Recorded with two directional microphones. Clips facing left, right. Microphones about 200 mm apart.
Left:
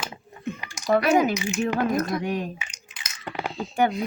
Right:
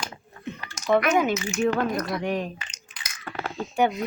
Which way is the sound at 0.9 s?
35° left (ahead or behind).